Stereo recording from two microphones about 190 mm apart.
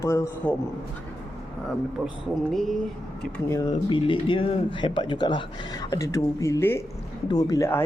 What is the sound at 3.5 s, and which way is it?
Speech, 15° left (ahead or behind).